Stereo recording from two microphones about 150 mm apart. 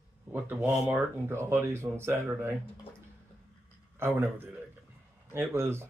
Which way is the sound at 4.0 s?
15° right (ahead or behind).